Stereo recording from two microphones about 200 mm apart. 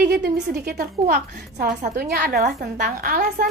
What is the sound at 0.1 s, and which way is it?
A woman's voice, 50° right (ahead or behind).